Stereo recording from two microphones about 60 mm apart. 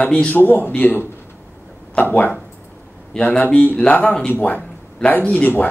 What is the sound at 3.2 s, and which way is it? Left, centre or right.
Speech, left.